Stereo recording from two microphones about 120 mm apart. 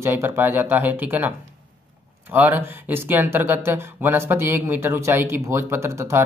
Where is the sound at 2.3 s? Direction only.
15° right (ahead or behind).